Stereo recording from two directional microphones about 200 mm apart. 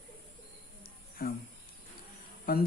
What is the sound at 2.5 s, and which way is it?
Speech, 45° left (ahead or behind).